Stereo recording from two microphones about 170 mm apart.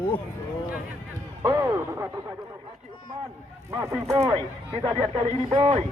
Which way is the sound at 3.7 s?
15° right (ahead or behind).